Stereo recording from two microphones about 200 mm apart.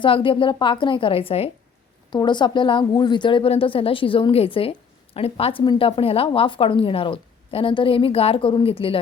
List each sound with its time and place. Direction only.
0.0 s a woman's voice: 25° left (ahead or behind)